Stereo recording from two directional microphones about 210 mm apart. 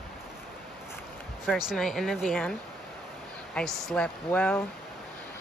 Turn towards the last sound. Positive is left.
turn(degrees=5)  # may be behind; listen again after turning